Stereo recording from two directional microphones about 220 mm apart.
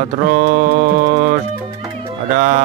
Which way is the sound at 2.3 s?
35° right (ahead or behind).